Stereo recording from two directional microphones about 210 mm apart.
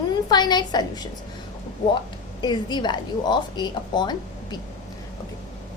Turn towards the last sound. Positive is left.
turn(degrees=20)  # may be behind; listen again after turning